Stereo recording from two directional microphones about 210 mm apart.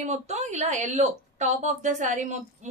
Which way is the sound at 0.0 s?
35° right (ahead or behind).